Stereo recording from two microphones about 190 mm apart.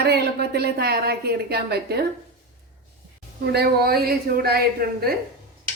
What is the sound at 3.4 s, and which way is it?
A woman's voice, 60° right (ahead or behind).